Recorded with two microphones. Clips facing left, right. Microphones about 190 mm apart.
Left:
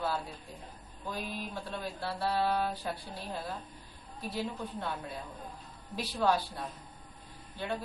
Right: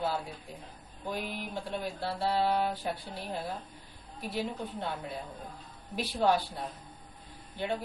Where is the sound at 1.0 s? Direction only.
20° right (ahead or behind).